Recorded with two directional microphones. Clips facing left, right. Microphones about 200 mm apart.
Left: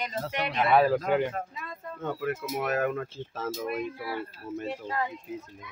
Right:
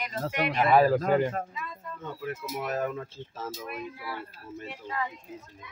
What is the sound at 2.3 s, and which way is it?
Speech, 65° left (ahead or behind).